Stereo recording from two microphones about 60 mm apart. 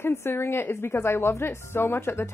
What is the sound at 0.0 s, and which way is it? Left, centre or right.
A woman's voice, left.